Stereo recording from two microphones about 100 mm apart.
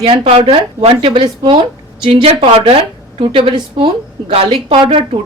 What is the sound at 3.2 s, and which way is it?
Speech, 60° right (ahead or behind).